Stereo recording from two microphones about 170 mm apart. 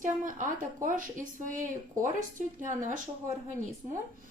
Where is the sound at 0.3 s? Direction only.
50° right (ahead or behind).